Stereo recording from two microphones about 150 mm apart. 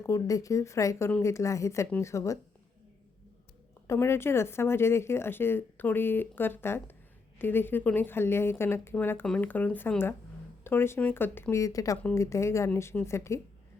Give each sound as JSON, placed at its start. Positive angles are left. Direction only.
{"t": 0.0, "sound": "speech", "side_deg": 20}
{"t": 3.8, "sound": "speech", "side_deg": 15}